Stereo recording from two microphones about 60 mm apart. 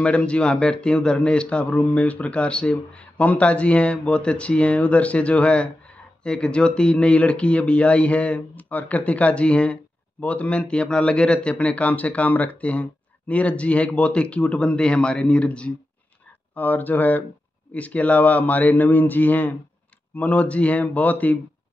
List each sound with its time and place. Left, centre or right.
0.0 s speech: centre
16.5 s speech: left